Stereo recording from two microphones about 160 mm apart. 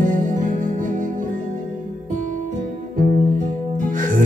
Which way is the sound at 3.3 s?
55° right (ahead or behind).